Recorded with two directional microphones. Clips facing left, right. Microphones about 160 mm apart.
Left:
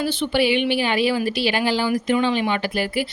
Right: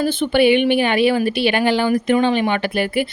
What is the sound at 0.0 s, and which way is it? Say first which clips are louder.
Speech: right 5 dB; 50° right (ahead or behind).